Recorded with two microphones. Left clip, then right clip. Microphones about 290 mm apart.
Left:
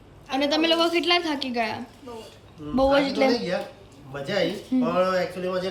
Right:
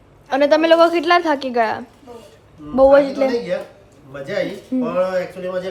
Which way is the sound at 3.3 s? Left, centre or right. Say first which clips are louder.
Right 5 dB; centre.